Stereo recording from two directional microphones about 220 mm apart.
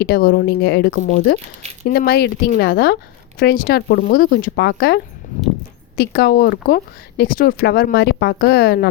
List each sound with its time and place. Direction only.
0.0 s speech: 45° left (ahead or behind)
5.2 s a sound: 35° left (ahead or behind)
6.0 s speech: 45° left (ahead or behind)